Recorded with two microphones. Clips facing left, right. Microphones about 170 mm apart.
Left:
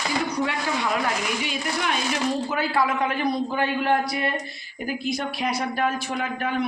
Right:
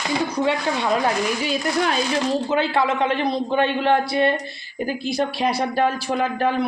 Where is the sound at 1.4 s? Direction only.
35° right (ahead or behind).